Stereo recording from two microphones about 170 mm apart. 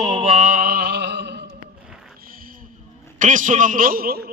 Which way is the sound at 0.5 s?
60° right (ahead or behind).